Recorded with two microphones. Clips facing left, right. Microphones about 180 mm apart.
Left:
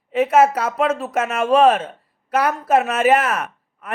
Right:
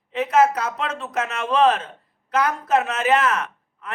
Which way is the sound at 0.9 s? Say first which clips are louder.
Left 6 dB; 5° left (ahead or behind).